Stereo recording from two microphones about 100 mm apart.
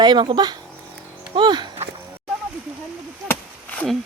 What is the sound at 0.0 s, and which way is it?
Speech, 45° right (ahead or behind).